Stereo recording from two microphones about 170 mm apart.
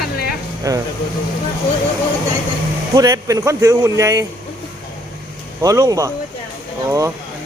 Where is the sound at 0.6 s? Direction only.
20° right (ahead or behind).